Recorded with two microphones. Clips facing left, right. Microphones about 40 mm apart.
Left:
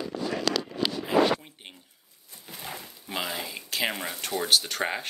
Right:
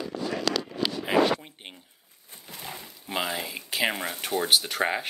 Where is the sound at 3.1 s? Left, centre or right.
Centre.